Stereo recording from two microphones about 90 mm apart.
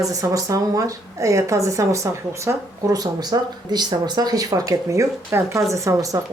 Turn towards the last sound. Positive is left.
turn(degrees=-40)  # may be behind; listen again after turning